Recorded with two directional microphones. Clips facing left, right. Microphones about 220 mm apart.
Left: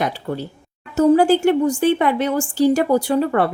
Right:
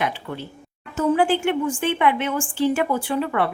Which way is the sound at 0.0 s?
40° left (ahead or behind).